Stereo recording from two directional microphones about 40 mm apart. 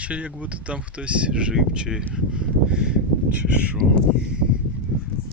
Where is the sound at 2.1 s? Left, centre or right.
Right.